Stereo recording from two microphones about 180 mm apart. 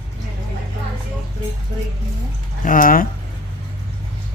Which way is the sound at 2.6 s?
50° left (ahead or behind).